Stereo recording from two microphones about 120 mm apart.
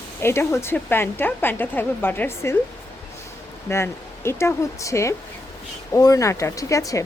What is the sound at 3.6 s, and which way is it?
A woman's voice, 20° left (ahead or behind).